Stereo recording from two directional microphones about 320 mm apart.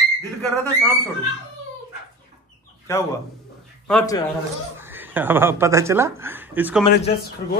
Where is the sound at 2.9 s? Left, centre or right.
Centre.